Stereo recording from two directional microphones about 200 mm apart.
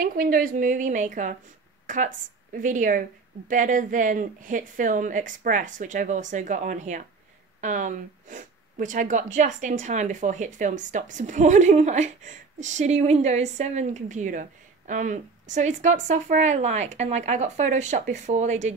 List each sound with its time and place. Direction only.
0.0 s speech: 45° right (ahead or behind)